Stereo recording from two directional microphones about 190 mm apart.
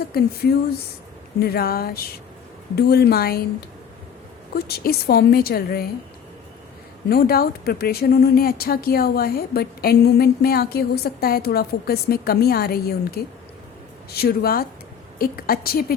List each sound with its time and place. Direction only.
0.1 s a woman's voice: 55° left (ahead or behind)
4.5 s a woman's voice: 55° left (ahead or behind)
7.1 s a woman's voice: 55° left (ahead or behind)